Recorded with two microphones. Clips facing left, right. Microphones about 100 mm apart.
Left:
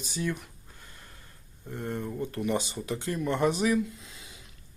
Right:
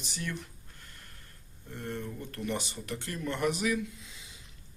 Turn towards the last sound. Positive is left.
turn(degrees=35)  # may be behind; listen again after turning